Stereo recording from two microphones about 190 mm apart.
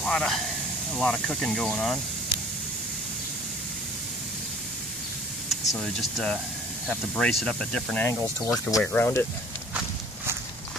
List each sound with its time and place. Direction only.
0.0 s speech: 5° left (ahead or behind)
5.5 s speech: centre (ahead or behind)